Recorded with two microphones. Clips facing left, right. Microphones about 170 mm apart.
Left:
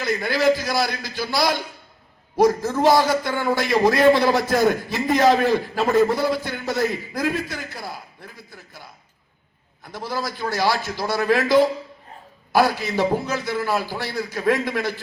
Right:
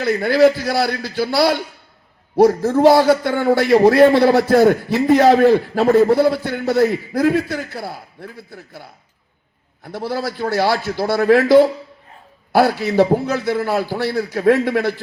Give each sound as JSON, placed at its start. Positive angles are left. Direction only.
{"t": 0.0, "sound": "a man's voice", "side_deg": -65}